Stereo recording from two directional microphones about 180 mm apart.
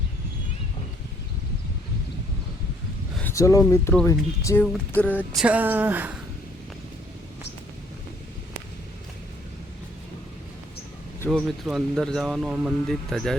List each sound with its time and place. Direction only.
3.2 s a sound: 15° left (ahead or behind)
4.0 s speech: 15° left (ahead or behind)
5.4 s a woman's voice: 10° right (ahead or behind)
11.3 s speech: centre (ahead or behind)